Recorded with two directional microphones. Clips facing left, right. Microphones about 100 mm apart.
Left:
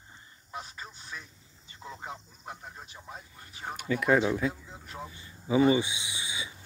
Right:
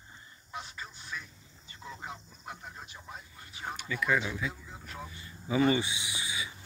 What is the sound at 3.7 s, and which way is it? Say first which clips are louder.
Speech: left 5 dB; 45° left (ahead or behind).